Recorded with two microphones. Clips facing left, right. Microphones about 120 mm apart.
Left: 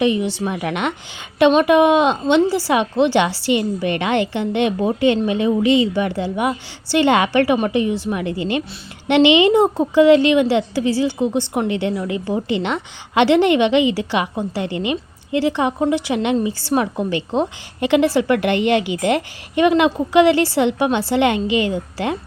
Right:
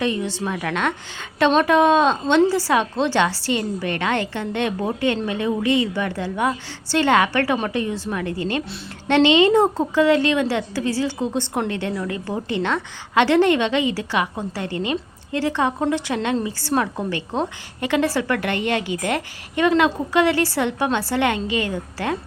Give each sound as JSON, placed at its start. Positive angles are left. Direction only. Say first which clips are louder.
{"t": 0.0, "sound": "a woman's voice", "louder": "left 5 dB", "side_deg": 15}